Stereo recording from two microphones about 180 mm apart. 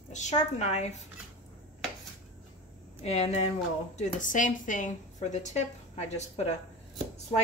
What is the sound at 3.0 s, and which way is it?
A woman's voice, 35° left (ahead or behind).